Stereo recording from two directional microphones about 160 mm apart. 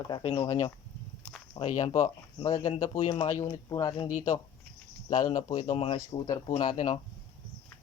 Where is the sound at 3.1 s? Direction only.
35° left (ahead or behind).